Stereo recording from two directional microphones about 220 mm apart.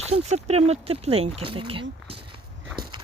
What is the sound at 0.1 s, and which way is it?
Speech, 30° right (ahead or behind).